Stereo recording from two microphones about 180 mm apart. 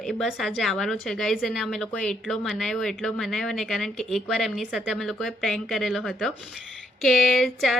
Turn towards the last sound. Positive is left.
turn(degrees=0)  # may be behind; listen again after turning